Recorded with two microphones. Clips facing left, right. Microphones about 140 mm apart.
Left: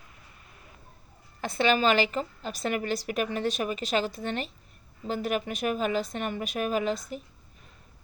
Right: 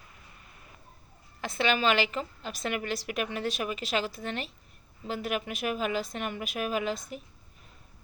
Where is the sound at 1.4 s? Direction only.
Centre (ahead or behind).